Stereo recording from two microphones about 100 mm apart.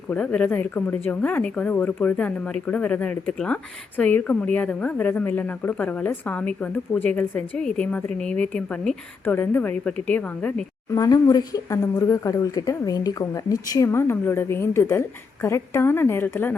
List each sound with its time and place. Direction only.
0.1 s speech: 10° left (ahead or behind)
9.2 s speech: 20° left (ahead or behind)
10.9 s speech: 40° left (ahead or behind)
13.9 s a woman's voice: 25° left (ahead or behind)